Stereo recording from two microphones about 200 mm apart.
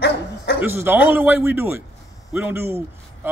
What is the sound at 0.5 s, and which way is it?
A man's voice, 10° right (ahead or behind).